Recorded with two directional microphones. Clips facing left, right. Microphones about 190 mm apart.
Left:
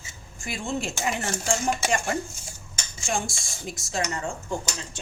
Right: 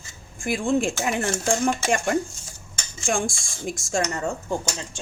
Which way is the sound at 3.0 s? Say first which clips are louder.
Right 4 dB; 50° right (ahead or behind).